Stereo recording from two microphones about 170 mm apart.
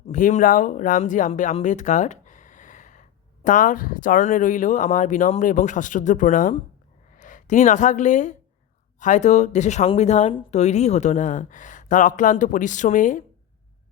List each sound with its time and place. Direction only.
0.1 s a woman's voice: 50° left (ahead or behind)